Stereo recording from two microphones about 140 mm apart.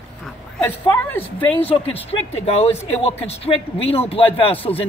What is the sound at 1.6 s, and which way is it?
Speech, 45° left (ahead or behind).